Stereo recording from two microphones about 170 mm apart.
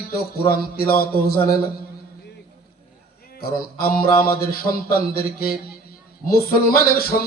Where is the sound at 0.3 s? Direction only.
65° left (ahead or behind).